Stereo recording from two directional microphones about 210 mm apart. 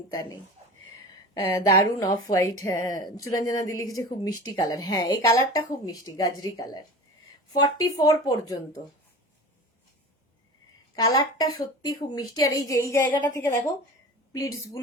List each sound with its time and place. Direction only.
0.1 s a woman's voice: 20° left (ahead or behind)
1.5 s a woman's voice: 15° left (ahead or behind)
10.9 s speech: 20° left (ahead or behind)